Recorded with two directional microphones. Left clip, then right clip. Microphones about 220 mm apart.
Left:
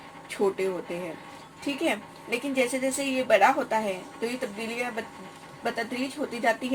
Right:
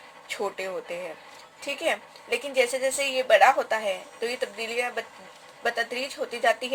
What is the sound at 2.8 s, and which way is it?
Speech, 45° right (ahead or behind).